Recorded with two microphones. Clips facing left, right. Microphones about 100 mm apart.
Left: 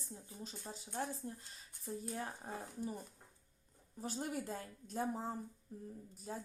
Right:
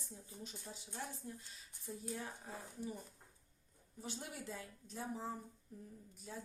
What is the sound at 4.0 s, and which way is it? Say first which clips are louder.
A woman's voice: left 7 dB; 40° left (ahead or behind).